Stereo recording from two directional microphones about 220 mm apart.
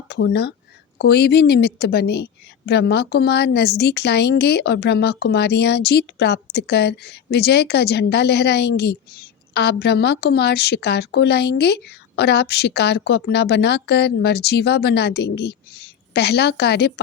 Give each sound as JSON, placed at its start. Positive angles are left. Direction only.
{"t": 0.1, "sound": "a woman's voice", "side_deg": 50}